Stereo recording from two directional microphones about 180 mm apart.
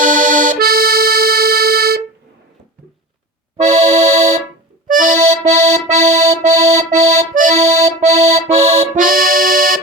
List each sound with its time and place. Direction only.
0.0 s accordion: 50° right (ahead or behind)
3.6 s accordion: 40° right (ahead or behind)